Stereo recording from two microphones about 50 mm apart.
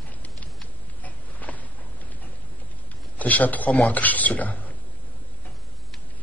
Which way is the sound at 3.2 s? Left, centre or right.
Left.